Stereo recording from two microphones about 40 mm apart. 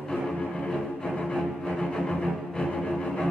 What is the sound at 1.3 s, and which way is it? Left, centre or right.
Music, centre.